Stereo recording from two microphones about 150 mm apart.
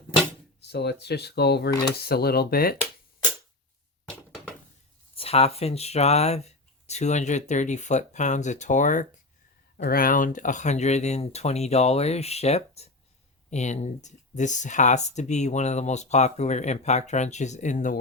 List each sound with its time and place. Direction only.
0.6 s speech: 90° left
5.1 s speech: 40° left (ahead or behind); by 9.0 s 55° left (ahead or behind)
9.7 s speech: 70° left (ahead or behind); by 17.9 s 55° left (ahead or behind)